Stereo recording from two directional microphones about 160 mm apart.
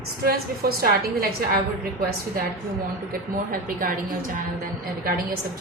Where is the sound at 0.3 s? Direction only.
75° right (ahead or behind).